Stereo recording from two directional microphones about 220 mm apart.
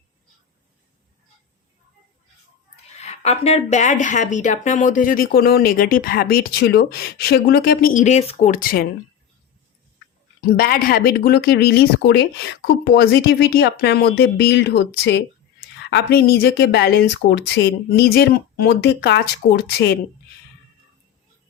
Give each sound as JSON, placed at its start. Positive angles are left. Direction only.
{"t": 3.0, "sound": "speech", "side_deg": 30}
{"t": 10.6, "sound": "speech", "side_deg": 45}